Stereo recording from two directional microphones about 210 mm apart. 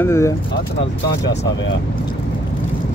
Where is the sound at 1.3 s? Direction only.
55° left (ahead or behind).